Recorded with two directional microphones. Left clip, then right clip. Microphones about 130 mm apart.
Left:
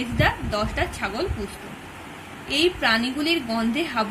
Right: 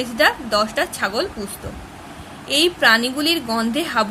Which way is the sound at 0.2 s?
65° right (ahead or behind).